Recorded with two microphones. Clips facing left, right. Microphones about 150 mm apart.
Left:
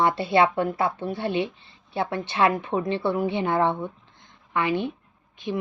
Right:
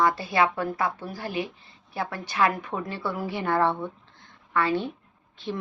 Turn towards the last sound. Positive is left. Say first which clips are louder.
# left 2 dB
turn(degrees=15)  # may be behind; listen again after turning